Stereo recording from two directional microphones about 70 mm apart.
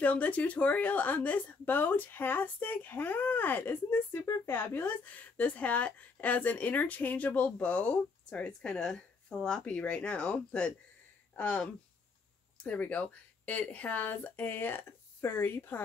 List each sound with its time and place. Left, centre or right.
0.0 s a woman's voice: left